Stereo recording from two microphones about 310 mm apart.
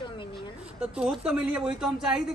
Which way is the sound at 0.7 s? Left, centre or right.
Centre.